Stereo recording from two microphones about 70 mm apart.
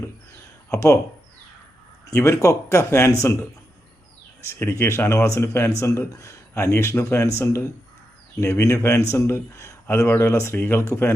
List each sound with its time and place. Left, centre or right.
0.7 s speech: left
2.1 s speech: left
4.8 s speech: left